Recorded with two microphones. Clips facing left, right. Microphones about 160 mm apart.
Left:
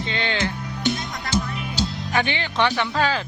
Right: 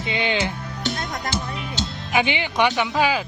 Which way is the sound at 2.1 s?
15° right (ahead or behind).